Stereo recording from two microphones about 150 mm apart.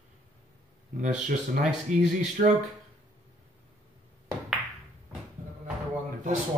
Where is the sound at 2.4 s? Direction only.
65° right (ahead or behind).